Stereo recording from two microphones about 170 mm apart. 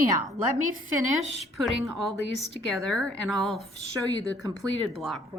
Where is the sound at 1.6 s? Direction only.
Centre (ahead or behind).